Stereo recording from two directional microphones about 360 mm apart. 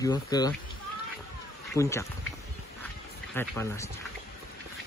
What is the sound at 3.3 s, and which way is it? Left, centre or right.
Speech, centre.